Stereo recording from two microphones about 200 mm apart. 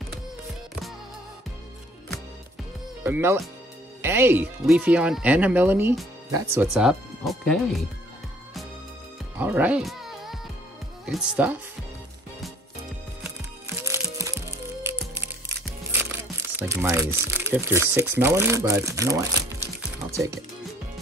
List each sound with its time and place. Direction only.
3.0 s speech: 10° right (ahead or behind)
9.4 s music: 10° right (ahead or behind)
11.1 s speech: 5° right (ahead or behind)
14.1 s music: 15° right (ahead or behind)
15.9 s speech: 10° right (ahead or behind)